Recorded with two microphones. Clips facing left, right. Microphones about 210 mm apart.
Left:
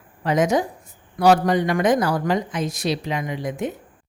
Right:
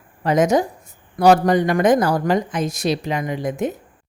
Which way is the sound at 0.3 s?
45° right (ahead or behind).